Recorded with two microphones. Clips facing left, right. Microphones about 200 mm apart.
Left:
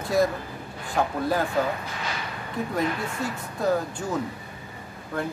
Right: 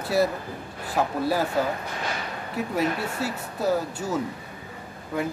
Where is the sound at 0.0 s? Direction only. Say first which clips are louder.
Even; 5° right (ahead or behind).